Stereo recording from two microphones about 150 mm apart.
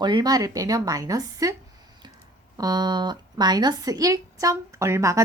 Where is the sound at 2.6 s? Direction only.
25° right (ahead or behind).